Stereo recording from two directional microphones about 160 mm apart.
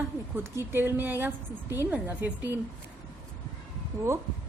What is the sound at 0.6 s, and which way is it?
A woman's voice, 15° right (ahead or behind).